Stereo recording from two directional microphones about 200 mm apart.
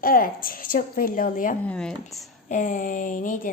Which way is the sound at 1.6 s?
5° left (ahead or behind).